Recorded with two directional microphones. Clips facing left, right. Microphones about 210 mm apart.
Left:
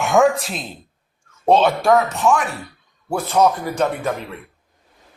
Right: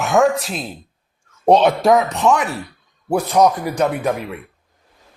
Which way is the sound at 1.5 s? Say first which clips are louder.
Right 2 dB; 20° right (ahead or behind).